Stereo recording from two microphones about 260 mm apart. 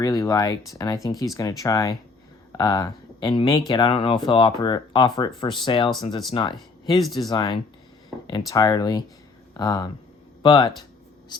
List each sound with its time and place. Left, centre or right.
0.0 s speech: centre